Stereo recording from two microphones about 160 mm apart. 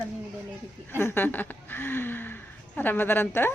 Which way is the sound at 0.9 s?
15° left (ahead or behind).